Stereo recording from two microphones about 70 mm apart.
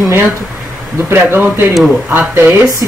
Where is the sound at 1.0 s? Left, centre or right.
Right.